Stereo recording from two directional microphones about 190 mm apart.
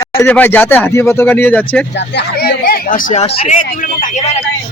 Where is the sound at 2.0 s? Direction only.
60° left (ahead or behind); by 4.3 s 45° left (ahead or behind).